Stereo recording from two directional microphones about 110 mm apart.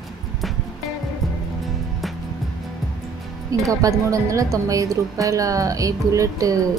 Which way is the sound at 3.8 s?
30° right (ahead or behind).